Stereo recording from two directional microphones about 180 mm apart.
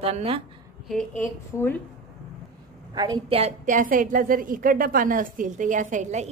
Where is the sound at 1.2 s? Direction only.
10° left (ahead or behind).